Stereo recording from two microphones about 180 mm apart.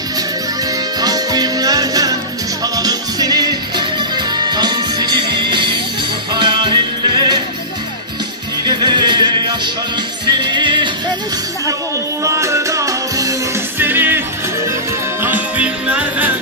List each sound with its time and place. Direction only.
1.0 s music: 20° right (ahead or behind)
8.6 s music: 25° right (ahead or behind)
12.2 s music: 15° right (ahead or behind)
15.2 s music: 10° right (ahead or behind)